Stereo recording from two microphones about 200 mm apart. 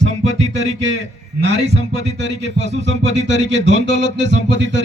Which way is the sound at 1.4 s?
60° right (ahead or behind).